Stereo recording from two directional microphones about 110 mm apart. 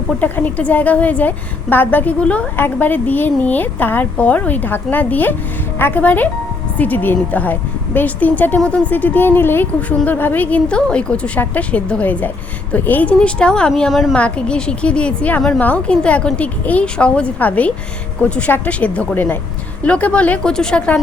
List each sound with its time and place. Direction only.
0.2 s a woman's voice: 15° left (ahead or behind)